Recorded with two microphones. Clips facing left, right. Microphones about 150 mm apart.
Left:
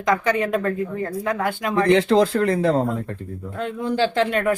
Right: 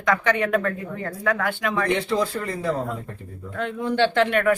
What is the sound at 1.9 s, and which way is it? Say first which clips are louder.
Speech: left 10 dB; 90° left.